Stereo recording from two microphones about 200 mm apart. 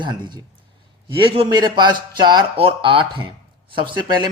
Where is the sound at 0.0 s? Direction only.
20° right (ahead or behind).